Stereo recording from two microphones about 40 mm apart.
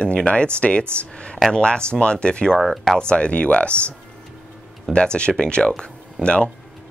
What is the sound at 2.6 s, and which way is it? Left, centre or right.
Speech, centre.